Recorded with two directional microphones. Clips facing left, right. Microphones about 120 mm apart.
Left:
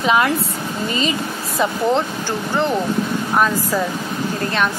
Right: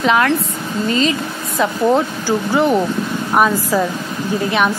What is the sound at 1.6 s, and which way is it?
Speech, 5° right (ahead or behind).